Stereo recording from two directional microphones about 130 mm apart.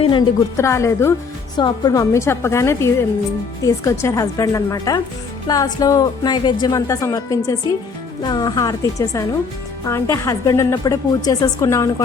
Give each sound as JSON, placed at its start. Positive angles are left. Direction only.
{"t": 0.0, "sound": "a woman's voice", "side_deg": 40}
{"t": 0.5, "sound": "speech", "side_deg": 20}